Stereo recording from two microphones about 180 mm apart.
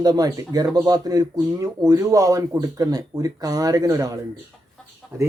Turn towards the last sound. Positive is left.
turn(degrees=-15)  # may be behind; listen again after turning